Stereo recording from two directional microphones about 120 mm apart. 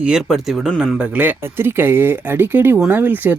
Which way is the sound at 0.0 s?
5° right (ahead or behind).